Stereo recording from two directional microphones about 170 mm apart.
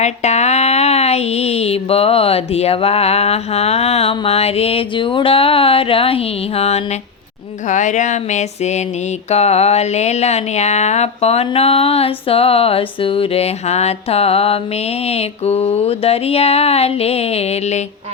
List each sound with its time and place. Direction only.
0.0 s speech: 40° left (ahead or behind)
7.7 s a sound: 45° left (ahead or behind)
9.3 s speech: 40° left (ahead or behind)